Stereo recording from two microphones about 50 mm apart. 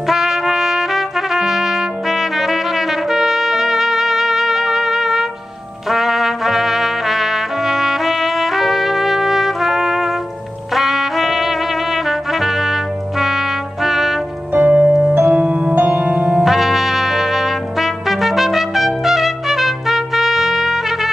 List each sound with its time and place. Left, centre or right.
0.1 s trumpet: centre
13.8 s trumpet: centre
14.5 s music: right
16.4 s trumpet: centre